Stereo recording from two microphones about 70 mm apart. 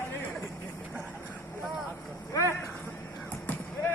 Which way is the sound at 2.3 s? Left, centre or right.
Left.